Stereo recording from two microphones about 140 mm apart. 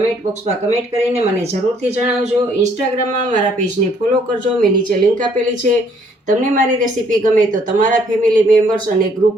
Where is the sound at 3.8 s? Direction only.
45° right (ahead or behind).